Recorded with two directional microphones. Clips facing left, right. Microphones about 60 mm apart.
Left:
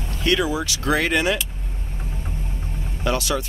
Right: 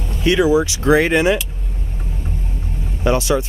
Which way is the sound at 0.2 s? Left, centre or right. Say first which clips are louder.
Right 7 dB; centre.